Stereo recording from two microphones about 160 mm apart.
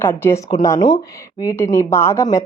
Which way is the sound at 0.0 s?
15° left (ahead or behind).